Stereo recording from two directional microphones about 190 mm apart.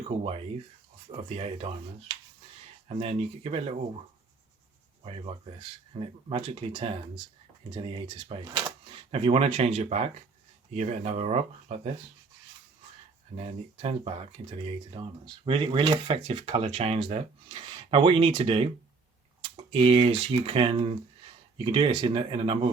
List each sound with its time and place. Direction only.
0.2 s speech: 30° right (ahead or behind)
5.0 s speech: 30° right (ahead or behind)
13.3 s speech: 30° right (ahead or behind)